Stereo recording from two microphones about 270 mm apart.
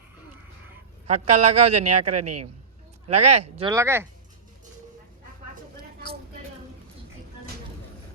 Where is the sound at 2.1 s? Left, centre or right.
Right.